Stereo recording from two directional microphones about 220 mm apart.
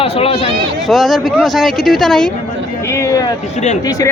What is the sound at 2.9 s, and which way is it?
Speech, 15° left (ahead or behind).